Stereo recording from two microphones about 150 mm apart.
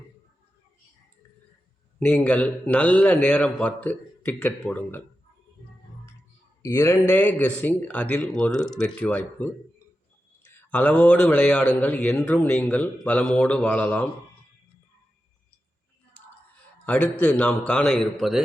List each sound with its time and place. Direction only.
2.0 s a man's voice: 10° left (ahead or behind)
6.6 s a sound: 15° left (ahead or behind)
7.1 s a man's voice: 15° left (ahead or behind)
10.7 s a man's voice: 10° left (ahead or behind)
16.8 s a man's voice: 10° left (ahead or behind)